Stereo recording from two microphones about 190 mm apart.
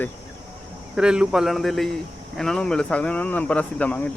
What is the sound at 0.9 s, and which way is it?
Speech, 5° right (ahead or behind).